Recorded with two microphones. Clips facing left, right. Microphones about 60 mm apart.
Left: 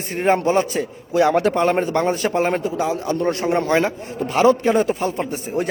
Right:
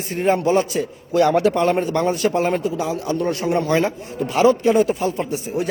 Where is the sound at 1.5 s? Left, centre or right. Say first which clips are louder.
Even; left.